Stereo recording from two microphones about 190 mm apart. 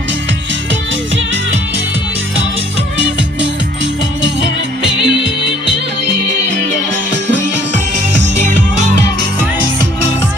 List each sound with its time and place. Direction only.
4.8 s music: 25° left (ahead or behind)